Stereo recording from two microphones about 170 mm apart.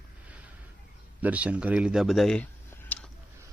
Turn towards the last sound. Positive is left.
turn(degrees=10)  # may be behind; listen again after turning